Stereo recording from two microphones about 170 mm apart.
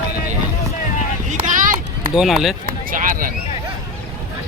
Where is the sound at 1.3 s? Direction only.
45° right (ahead or behind).